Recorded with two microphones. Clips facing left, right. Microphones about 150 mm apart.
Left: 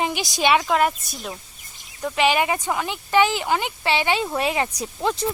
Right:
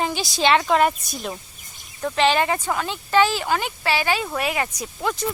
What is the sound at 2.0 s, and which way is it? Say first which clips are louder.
Speech: right 1 dB; 10° left (ahead or behind).